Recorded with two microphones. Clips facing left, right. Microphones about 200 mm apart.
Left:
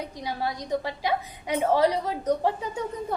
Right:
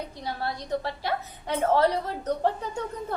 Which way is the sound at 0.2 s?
10° left (ahead or behind).